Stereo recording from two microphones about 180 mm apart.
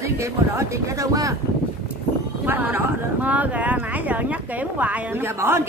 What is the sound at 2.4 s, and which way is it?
Speech, 10° right (ahead or behind).